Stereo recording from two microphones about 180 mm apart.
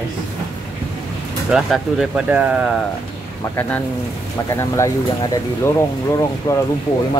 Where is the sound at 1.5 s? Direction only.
Centre (ahead or behind).